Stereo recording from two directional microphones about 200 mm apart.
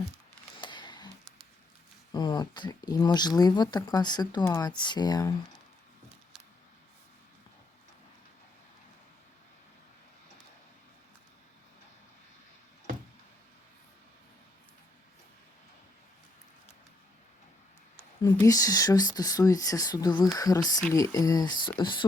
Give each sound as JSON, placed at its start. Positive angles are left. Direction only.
{"t": 0.6, "sound": "a sound", "side_deg": 25}
{"t": 2.1, "sound": "speech", "side_deg": 20}
{"t": 18.2, "sound": "speech", "side_deg": 20}